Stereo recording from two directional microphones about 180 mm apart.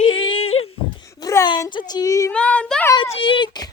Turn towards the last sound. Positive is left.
turn(degrees=25)  # may be behind; listen again after turning